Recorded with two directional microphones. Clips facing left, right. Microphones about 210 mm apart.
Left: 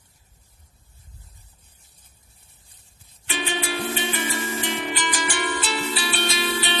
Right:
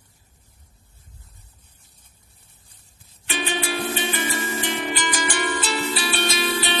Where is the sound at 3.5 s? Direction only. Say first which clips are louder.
Right 1 dB; 45° right (ahead or behind).